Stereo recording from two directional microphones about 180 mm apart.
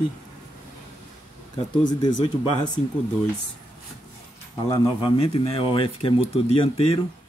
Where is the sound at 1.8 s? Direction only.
25° left (ahead or behind).